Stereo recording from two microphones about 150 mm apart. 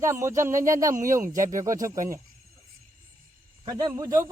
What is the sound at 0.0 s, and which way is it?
Speech, 20° right (ahead or behind).